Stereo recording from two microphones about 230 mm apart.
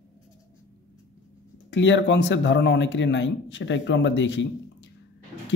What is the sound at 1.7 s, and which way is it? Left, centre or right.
Speech, left.